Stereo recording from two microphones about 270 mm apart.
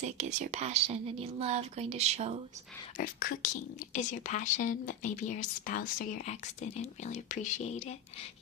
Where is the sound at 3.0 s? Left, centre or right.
Left.